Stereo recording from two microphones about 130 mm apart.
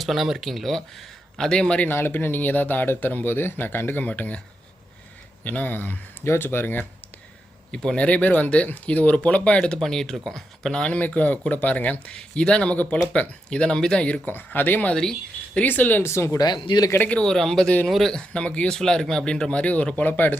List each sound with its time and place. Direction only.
0.0 s speech: centre (ahead or behind)
5.4 s speech: 10° left (ahead or behind)
16.6 s speech: 30° left (ahead or behind)
16.9 s speech: 10° left (ahead or behind)